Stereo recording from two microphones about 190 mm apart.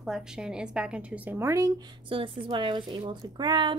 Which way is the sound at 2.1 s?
30° right (ahead or behind).